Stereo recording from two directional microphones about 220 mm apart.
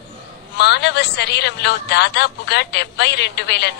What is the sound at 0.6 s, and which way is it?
Speech, 50° left (ahead or behind).